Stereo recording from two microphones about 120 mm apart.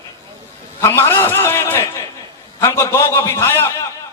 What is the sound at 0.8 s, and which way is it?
A man's voice, 20° left (ahead or behind).